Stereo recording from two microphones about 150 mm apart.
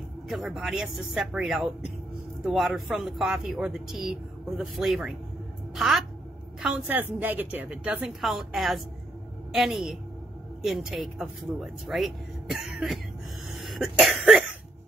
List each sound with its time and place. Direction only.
0.3 s speech: centre (ahead or behind)
13.6 s cough: centre (ahead or behind)